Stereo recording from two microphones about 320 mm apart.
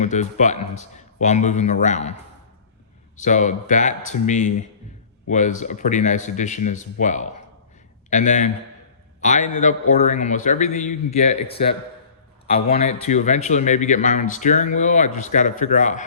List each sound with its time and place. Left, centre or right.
0.0 s speech: left
3.2 s speech: left
12.5 s speech: centre